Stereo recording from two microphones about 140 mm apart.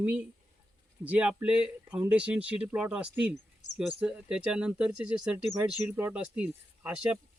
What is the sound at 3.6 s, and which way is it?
Insect, 60° left (ahead or behind).